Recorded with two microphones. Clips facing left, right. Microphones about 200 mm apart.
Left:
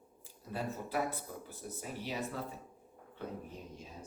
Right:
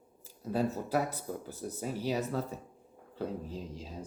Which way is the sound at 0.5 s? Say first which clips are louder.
Right 6 dB; 40° right (ahead or behind).